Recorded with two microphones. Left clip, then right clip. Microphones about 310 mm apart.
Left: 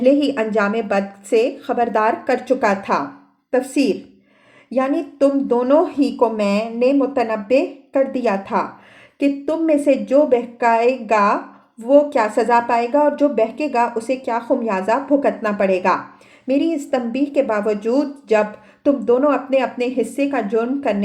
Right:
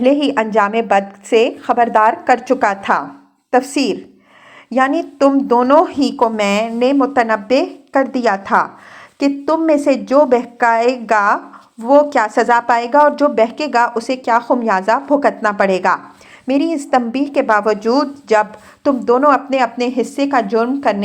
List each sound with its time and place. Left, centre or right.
0.0 s a woman's voice: centre